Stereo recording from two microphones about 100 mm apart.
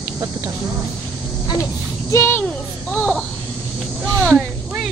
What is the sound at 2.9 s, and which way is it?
Speech, 5° left (ahead or behind).